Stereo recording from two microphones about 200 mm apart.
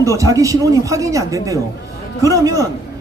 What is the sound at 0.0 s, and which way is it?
Speech, 15° right (ahead or behind).